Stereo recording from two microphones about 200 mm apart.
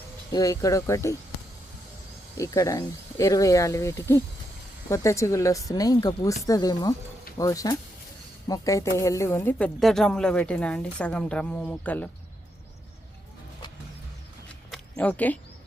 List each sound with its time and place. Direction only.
0.3 s speech: 15° left (ahead or behind)
2.4 s speech: 15° left (ahead or behind)
14.7 s a sound: 5° left (ahead or behind)